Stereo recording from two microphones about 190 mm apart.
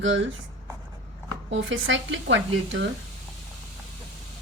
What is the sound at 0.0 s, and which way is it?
Speech, 80° right.